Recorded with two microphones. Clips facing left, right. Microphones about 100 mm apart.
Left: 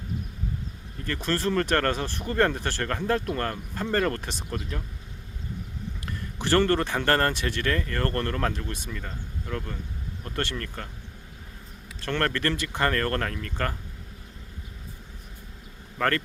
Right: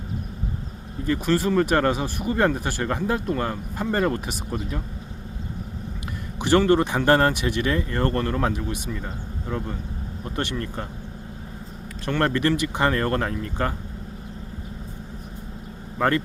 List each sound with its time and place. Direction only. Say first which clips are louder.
1.0 s speech: right 5 dB; 10° right (ahead or behind)
6.4 s speech: right 4 dB; 15° right (ahead or behind)
12.0 s speech: right 5 dB; 15° right (ahead or behind)
16.0 s speech: right 4 dB; 15° right (ahead or behind)